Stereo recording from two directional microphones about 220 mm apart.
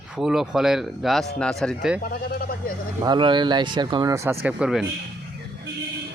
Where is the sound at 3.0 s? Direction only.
20° right (ahead or behind); by 4.8 s 5° right (ahead or behind).